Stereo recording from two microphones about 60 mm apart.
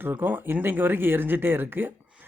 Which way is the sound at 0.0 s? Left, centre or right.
Right.